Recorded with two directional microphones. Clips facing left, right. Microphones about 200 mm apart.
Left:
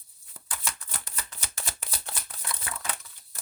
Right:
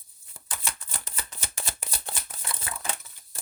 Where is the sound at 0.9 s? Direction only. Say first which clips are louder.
Right 1 dB; 25° right (ahead or behind).